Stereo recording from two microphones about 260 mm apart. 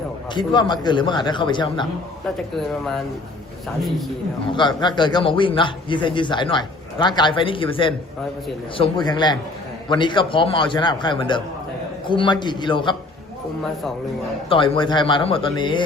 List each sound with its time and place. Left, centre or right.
0.3 s a man's voice: centre
4.5 s a man's voice: centre
14.5 s a man's voice: centre